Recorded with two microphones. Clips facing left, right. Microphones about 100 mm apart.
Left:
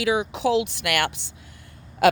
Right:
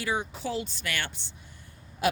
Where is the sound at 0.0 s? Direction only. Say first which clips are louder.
Left 9 dB; 90° left.